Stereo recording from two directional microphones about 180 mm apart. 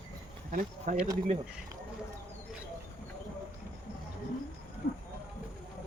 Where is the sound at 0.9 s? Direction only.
50° right (ahead or behind).